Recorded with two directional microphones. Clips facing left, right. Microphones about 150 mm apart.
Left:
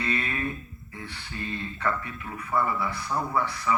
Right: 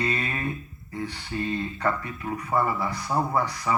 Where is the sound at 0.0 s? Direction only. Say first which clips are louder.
Right 2 dB; 40° right (ahead or behind).